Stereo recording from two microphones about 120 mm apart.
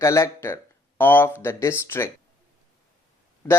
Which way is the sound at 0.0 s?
25° left (ahead or behind).